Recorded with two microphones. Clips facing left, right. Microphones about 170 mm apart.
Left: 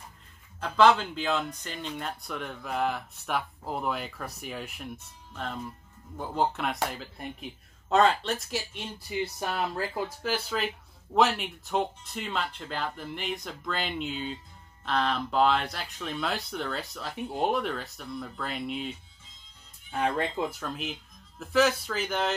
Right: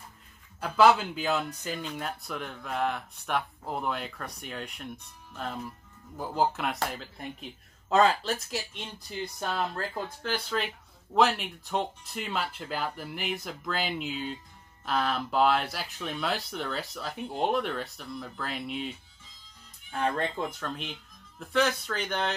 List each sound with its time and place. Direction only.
0.6 s speech: 5° right (ahead or behind)